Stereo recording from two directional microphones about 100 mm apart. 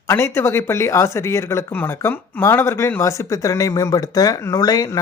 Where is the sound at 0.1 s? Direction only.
25° left (ahead or behind).